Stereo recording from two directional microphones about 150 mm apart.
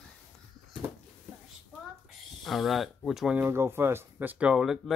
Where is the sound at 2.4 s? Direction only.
Centre (ahead or behind).